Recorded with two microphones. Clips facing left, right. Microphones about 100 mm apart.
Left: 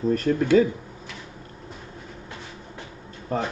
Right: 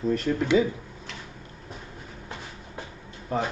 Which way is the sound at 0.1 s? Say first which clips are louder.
Left 4 dB; 45° left (ahead or behind).